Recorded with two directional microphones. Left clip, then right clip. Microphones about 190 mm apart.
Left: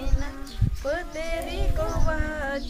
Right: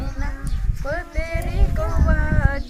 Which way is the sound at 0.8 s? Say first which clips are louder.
Right 1 dB; 15° left (ahead or behind).